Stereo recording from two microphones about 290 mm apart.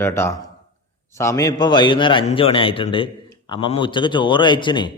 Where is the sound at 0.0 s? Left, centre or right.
Centre.